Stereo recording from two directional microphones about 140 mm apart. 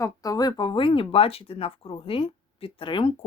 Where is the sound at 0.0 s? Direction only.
25° left (ahead or behind).